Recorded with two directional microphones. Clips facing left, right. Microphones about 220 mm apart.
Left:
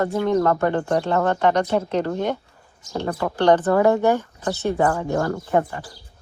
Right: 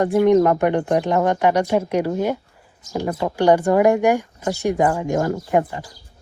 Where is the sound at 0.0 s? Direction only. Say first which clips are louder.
Right 5 dB; 20° right (ahead or behind).